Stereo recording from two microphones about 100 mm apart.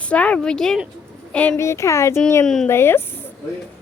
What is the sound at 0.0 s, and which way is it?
Speech, 10° left (ahead or behind).